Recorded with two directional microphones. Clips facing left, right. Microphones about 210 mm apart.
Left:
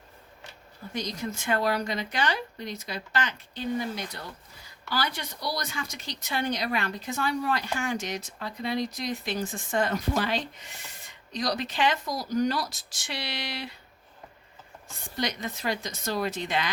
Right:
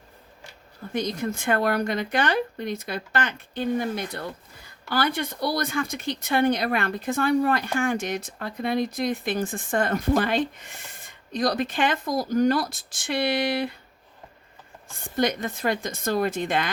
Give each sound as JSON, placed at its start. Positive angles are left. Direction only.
{"t": 0.9, "sound": "speech", "side_deg": -55}
{"t": 14.9, "sound": "speech", "side_deg": -50}